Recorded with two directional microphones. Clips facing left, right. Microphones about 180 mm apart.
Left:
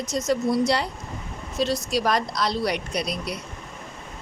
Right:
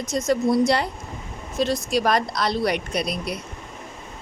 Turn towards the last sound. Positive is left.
turn(degrees=-55)  # may be behind; listen again after turning